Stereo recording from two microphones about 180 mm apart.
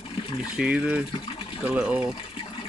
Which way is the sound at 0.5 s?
5° right (ahead or behind).